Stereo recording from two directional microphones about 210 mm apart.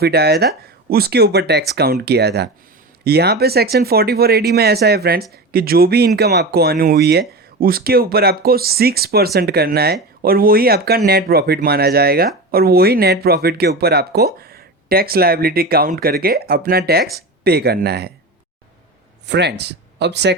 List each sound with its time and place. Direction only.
0.0 s speech: 50° right (ahead or behind)
19.3 s speech: 55° right (ahead or behind)